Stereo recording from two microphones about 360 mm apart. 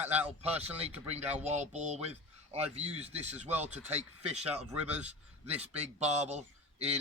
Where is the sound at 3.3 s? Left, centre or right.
Centre.